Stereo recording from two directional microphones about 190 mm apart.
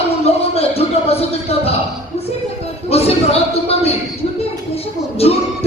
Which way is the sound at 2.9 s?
30° left (ahead or behind).